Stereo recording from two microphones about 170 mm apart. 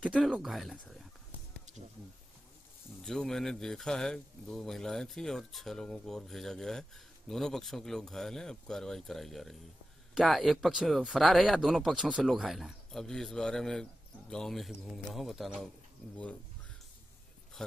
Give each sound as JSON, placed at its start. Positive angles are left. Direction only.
{"t": 0.0, "sound": "a man's voice", "side_deg": 5}
{"t": 1.7, "sound": "a sound", "side_deg": -45}
{"t": 3.0, "sound": "a man's voice", "side_deg": 5}
{"t": 17.6, "sound": "speech", "side_deg": 5}